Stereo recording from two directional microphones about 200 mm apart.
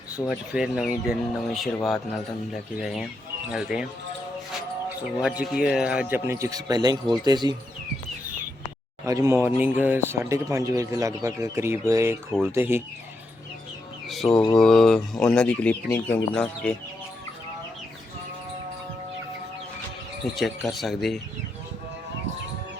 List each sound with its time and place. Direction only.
0.3 s speech: 5° right (ahead or behind)
5.2 s speech: 5° right (ahead or behind); by 7.5 s 20° right (ahead or behind)
9.0 s speech: 15° right (ahead or behind)
14.1 s speech: centre (ahead or behind)
20.3 s speech: centre (ahead or behind)